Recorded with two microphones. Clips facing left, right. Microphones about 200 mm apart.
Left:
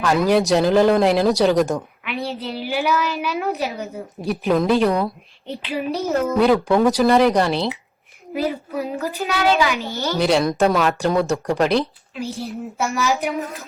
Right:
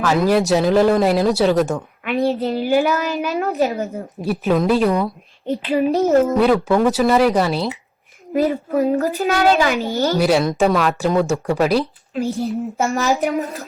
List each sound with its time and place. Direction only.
0.0 s speech: centre (ahead or behind)
2.0 s a child's voice: 45° right (ahead or behind)
4.3 s speech: centre (ahead or behind)
5.6 s a child's voice: 40° right (ahead or behind)
6.3 s speech: centre (ahead or behind)
8.3 s a child's voice: 45° right (ahead or behind)
10.2 s speech: 5° right (ahead or behind)
12.1 s a child's voice: 40° right (ahead or behind)